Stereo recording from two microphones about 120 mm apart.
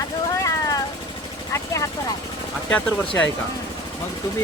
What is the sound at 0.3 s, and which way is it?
Vehicle, 25° left (ahead or behind).